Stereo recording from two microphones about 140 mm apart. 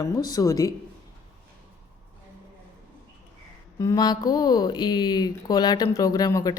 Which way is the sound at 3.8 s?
25° left (ahead or behind).